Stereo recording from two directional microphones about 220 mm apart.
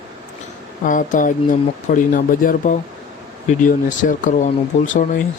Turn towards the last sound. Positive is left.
turn(degrees=35)  # may be behind; listen again after turning